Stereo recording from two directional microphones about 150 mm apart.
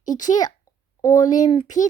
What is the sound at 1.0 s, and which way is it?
Speech, 25° left (ahead or behind).